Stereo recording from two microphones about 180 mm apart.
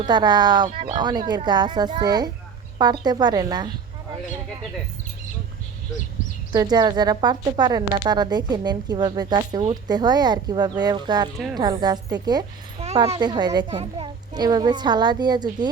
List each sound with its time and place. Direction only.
0.0 s a woman's voice: 25° right (ahead or behind)
6.5 s a woman's voice: 20° right (ahead or behind)